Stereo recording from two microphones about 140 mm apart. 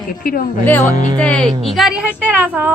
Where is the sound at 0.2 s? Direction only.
85° left.